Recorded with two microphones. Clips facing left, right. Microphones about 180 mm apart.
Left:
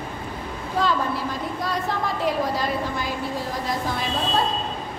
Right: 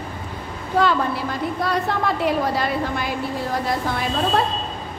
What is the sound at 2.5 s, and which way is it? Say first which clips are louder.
Speech: right 2 dB; 65° right (ahead or behind).